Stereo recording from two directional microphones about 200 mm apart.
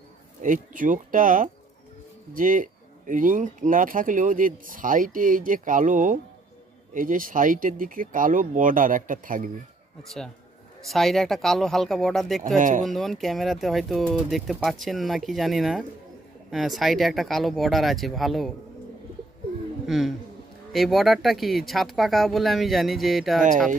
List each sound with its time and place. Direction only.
0.4 s speech: 40° right (ahead or behind)
10.0 s speech: centre (ahead or behind)
12.5 s speech: 40° right (ahead or behind)
12.8 s speech: centre (ahead or behind)
19.9 s speech: centre (ahead or behind)